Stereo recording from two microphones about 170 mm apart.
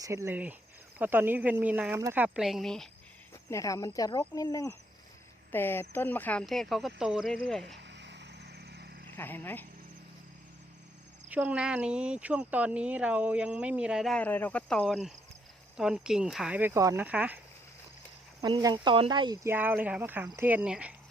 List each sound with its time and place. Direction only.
0.0 s speech: 15° right (ahead or behind); by 2.9 s centre (ahead or behind)
3.5 s speech: 20° left (ahead or behind); by 7.3 s 5° right (ahead or behind)
7.8 s a sound: 90° right; by 9.0 s 70° right (ahead or behind)
9.1 s speech: 10° left (ahead or behind)
11.3 s speech: 10° right (ahead or behind)
18.4 s speech: 25° right (ahead or behind); by 20.9 s 5° right (ahead or behind)